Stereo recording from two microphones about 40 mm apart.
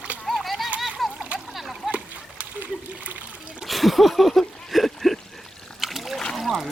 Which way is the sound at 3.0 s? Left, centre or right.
Right.